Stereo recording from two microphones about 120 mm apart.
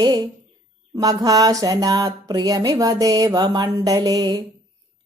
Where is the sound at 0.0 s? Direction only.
35° right (ahead or behind).